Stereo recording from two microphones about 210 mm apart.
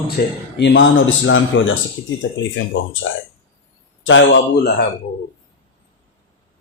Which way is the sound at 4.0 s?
60° left (ahead or behind).